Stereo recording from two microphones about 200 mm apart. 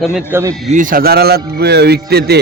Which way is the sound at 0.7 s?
45° right (ahead or behind).